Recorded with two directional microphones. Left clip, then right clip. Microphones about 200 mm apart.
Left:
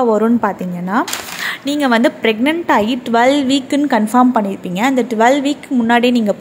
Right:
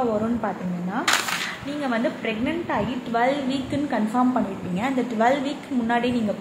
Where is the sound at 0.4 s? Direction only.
55° left (ahead or behind).